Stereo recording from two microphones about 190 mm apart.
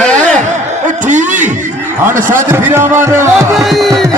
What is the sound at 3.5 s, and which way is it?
Speech, centre (ahead or behind).